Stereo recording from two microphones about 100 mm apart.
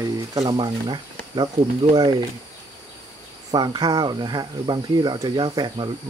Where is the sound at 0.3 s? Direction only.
35° right (ahead or behind).